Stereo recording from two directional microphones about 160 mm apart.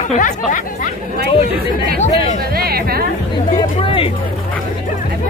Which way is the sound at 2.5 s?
70° right (ahead or behind).